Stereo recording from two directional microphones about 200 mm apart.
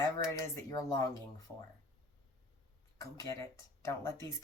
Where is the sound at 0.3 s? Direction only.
15° left (ahead or behind).